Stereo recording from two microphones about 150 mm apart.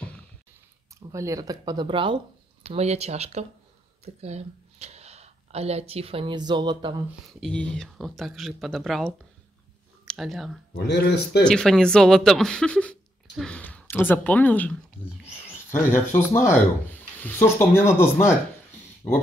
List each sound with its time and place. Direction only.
1.1 s speech: 20° right (ahead or behind)
2.7 s speech: 45° right (ahead or behind); by 7.0 s 30° right (ahead or behind)
7.3 s speech: 5° left (ahead or behind)